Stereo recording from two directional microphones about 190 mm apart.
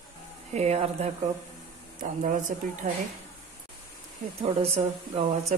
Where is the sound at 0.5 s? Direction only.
35° right (ahead or behind).